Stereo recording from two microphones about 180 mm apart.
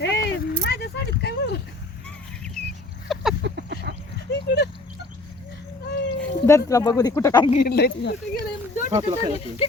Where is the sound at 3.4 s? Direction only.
70° right (ahead or behind).